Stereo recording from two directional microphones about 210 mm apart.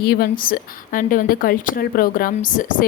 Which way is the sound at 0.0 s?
45° left (ahead or behind).